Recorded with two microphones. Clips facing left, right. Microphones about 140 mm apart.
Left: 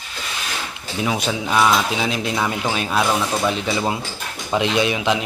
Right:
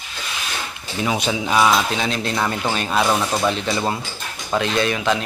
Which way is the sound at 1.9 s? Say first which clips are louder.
Left 1 dB; 5° left (ahead or behind).